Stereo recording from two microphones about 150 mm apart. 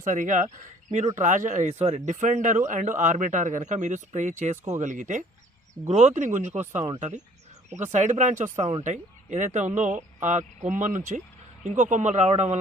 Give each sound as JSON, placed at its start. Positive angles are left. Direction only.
{"t": 0.0, "sound": "speech", "side_deg": -55}